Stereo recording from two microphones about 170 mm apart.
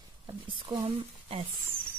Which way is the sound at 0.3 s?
25° right (ahead or behind).